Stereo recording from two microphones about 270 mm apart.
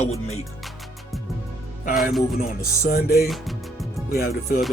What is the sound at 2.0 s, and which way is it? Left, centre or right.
Speech, centre.